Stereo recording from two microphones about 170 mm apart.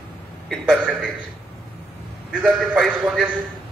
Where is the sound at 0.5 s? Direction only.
5° right (ahead or behind).